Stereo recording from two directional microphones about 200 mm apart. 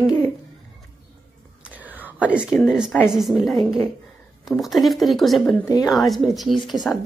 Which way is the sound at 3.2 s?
Centre (ahead or behind).